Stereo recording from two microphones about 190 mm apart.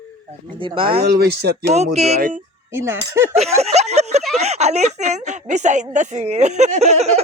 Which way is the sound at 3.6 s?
35° right (ahead or behind).